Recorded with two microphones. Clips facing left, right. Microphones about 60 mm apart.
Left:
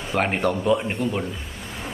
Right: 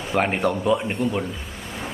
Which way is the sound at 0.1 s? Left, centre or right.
Centre.